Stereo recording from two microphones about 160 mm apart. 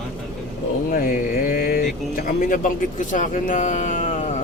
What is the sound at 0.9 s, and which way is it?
Speech, 60° left (ahead or behind).